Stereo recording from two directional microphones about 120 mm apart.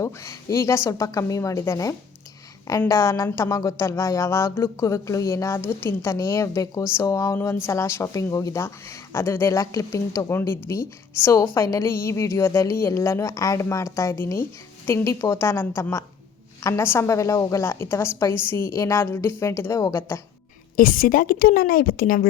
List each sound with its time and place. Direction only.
0.0 s a woman's voice: 25° left (ahead or behind)